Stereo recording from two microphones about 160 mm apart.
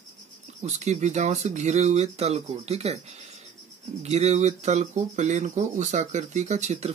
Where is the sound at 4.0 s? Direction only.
45° right (ahead or behind).